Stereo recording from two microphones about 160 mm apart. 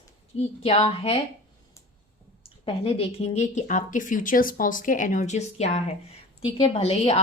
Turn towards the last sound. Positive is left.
turn(degrees=40)  # may be behind; listen again after turning